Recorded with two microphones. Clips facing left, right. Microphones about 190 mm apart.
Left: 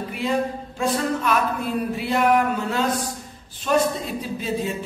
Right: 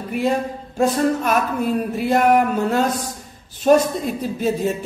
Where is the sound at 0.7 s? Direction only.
45° right (ahead or behind).